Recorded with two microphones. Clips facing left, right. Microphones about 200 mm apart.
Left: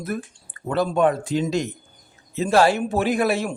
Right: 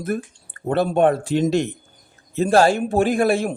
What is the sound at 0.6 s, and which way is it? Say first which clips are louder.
Speech: right 3 dB; 60° right (ahead or behind).